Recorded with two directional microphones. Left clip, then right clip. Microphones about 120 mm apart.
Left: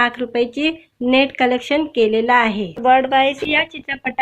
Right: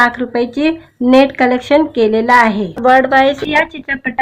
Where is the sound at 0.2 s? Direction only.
15° left (ahead or behind).